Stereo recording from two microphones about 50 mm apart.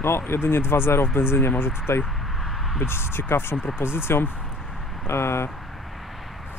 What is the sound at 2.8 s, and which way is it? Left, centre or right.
Speech, left.